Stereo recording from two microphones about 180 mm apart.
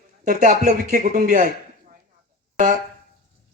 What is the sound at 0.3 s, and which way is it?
Speech, 45° right (ahead or behind).